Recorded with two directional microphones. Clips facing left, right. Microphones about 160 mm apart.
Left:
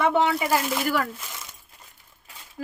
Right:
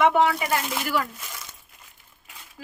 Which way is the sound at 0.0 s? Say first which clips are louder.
Right 2 dB; 30° left (ahead or behind).